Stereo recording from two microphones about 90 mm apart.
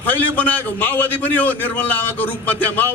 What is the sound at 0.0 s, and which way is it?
A man's voice, 20° left (ahead or behind).